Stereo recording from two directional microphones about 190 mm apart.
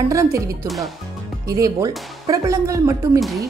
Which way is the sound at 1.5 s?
20° right (ahead or behind).